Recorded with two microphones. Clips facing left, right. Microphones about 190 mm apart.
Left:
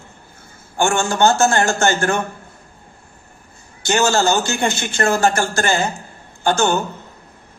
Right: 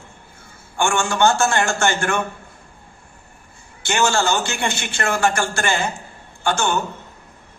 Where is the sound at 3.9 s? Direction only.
40° left (ahead or behind).